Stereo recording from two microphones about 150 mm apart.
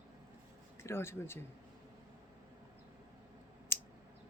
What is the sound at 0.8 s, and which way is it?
Speech, 15° left (ahead or behind).